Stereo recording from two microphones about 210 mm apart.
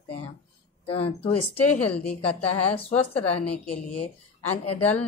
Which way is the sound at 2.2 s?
25° left (ahead or behind).